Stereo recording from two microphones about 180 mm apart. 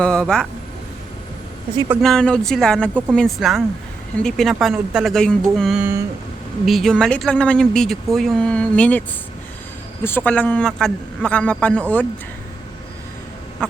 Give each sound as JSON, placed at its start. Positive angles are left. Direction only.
{"t": 0.0, "sound": "speech", "side_deg": 5}
{"t": 2.0, "sound": "a man's voice", "side_deg": 5}